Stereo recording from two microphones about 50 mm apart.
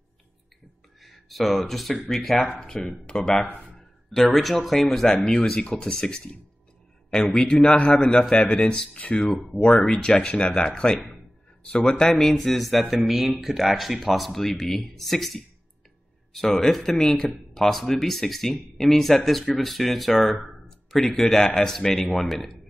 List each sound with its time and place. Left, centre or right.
1.0 s a man's voice: centre
4.1 s a man's voice: centre
7.3 s a man's voice: centre
9.2 s speech: centre
9.6 s a man's voice: centre
12.4 s a man's voice: centre